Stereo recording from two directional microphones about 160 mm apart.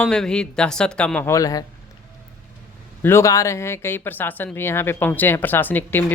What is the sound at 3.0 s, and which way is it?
Speech, 15° left (ahead or behind).